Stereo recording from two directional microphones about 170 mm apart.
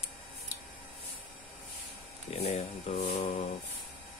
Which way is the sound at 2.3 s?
40° left (ahead or behind).